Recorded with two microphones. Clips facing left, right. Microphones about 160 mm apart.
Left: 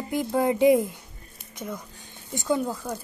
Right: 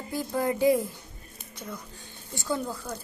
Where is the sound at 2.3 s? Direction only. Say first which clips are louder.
Left 5 dB; 20° left (ahead or behind).